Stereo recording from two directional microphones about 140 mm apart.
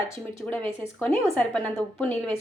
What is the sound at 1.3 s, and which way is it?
A woman's voice, 5° left (ahead or behind).